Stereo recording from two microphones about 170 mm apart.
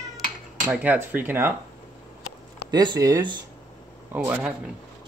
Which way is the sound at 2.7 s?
25° right (ahead or behind).